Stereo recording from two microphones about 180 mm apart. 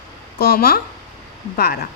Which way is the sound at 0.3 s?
60° left (ahead or behind).